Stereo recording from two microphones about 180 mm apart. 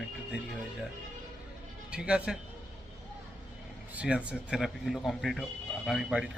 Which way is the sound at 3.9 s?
5° right (ahead or behind).